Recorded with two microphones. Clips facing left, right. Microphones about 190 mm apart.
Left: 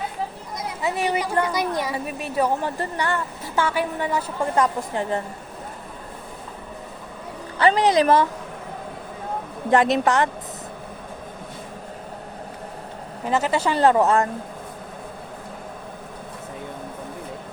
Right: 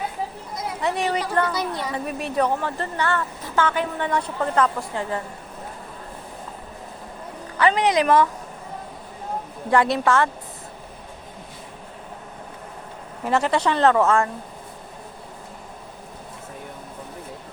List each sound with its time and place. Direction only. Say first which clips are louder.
0.8 s a woman's voice: even; 5° left (ahead or behind)
7.6 s a woman's voice: left 2 dB; 35° left (ahead or behind)
9.6 s a woman's voice: left 1 dB; 20° left (ahead or behind)
13.2 s a woman's voice: right 1 dB; 5° left (ahead or behind)
13.9 s a woman's voice: left 1 dB; 20° left (ahead or behind)